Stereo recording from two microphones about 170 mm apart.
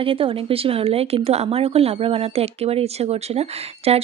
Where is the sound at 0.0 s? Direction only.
30° right (ahead or behind).